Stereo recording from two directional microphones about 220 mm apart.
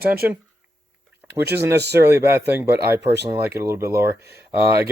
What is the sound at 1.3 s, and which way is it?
Speech, 50° right (ahead or behind).